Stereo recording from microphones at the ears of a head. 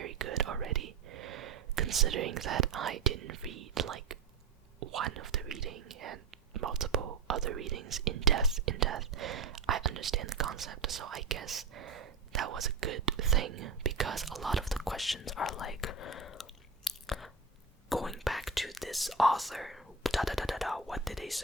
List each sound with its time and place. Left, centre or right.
0.0 s whispering: right
4.9 s speech: right
14.6 s speech: centre
15.2 s speech: left
17.9 s speech: centre